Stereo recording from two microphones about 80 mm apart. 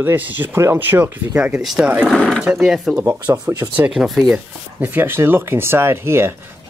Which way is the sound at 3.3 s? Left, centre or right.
Right.